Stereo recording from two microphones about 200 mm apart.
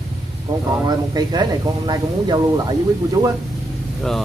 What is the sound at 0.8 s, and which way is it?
Speech, 20° right (ahead or behind).